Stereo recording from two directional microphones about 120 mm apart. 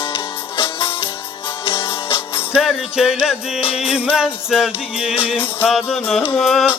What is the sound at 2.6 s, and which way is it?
Music, 5° right (ahead or behind).